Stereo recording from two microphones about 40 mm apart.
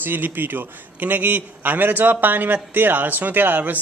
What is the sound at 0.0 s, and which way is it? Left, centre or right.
A man's voice, right.